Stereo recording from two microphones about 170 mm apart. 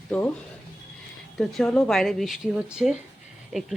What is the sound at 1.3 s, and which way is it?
Speech, centre (ahead or behind).